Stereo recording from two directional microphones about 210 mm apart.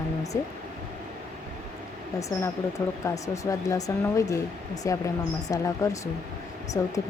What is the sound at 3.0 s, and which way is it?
Speech, 15° left (ahead or behind).